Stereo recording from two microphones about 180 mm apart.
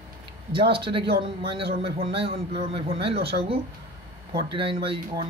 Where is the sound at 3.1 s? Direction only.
65° right (ahead or behind).